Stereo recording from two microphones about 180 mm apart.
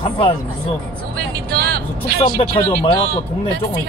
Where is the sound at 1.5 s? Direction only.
60° right (ahead or behind).